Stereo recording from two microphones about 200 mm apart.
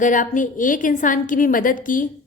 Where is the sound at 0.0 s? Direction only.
40° left (ahead or behind).